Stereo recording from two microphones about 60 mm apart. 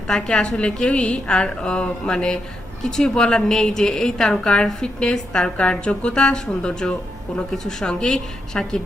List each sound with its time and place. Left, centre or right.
0.1 s a woman's voice: centre